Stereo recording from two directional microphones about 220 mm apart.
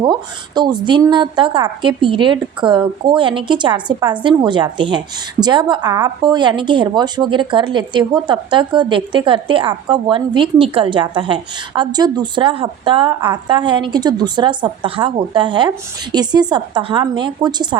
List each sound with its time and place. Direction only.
0.0 s a woman's voice: 20° right (ahead or behind)